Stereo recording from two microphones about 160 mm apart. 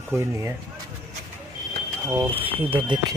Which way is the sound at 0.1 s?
15° right (ahead or behind).